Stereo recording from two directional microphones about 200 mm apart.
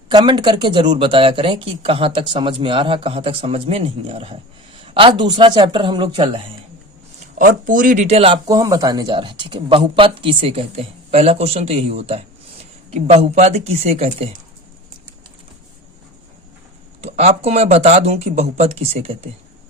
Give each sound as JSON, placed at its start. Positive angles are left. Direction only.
{"t": 0.1, "sound": "speech", "side_deg": -20}
{"t": 7.3, "sound": "speech", "side_deg": -40}
{"t": 8.4, "sound": "speech", "side_deg": -20}
{"t": 17.0, "sound": "speech", "side_deg": -30}